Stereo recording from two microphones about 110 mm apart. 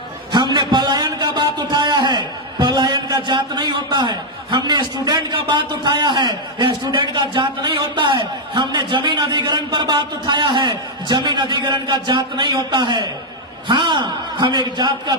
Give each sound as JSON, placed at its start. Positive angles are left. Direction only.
{"t": 0.3, "sound": "a man's voice", "side_deg": -45}